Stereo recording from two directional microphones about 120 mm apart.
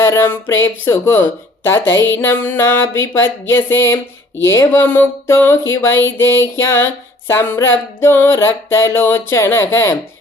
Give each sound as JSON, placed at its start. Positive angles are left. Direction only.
{"t": 0.0, "sound": "speech", "side_deg": 20}